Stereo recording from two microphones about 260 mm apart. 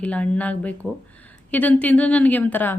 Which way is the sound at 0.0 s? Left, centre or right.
Centre.